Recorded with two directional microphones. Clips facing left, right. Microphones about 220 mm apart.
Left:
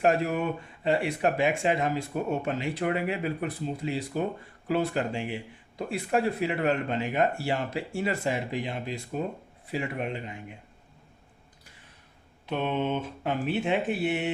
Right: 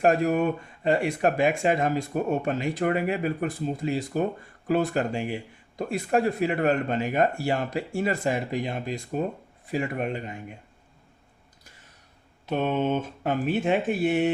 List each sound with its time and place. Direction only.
0.0 s speech: 45° right (ahead or behind)
12.5 s speech: 45° right (ahead or behind)